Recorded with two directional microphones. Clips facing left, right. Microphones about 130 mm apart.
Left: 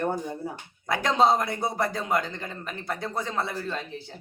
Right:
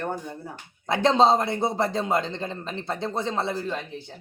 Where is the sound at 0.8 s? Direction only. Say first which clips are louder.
Right 3 dB; 25° right (ahead or behind).